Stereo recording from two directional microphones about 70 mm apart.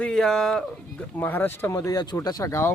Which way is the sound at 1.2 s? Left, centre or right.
Left.